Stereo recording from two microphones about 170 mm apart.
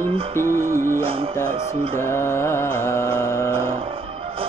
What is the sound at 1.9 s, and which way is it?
Mantra, 15° left (ahead or behind).